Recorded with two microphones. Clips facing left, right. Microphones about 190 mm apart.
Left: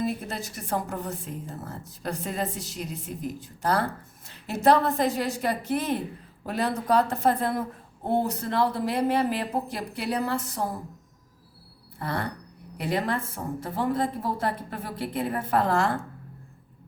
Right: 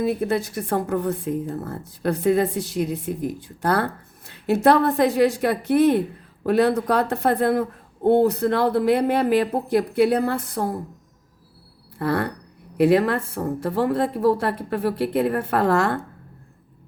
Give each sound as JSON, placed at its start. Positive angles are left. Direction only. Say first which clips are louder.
{"t": 0.0, "sound": "a woman's voice", "louder": "right 8 dB", "side_deg": -60}
{"t": 11.9, "sound": "a woman's voice", "louder": "right 8 dB", "side_deg": -65}